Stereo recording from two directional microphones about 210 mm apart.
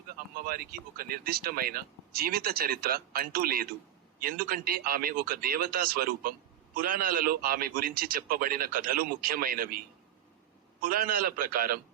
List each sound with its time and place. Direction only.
0.4 s speech: 45° right (ahead or behind)
10.8 s speech: 45° right (ahead or behind)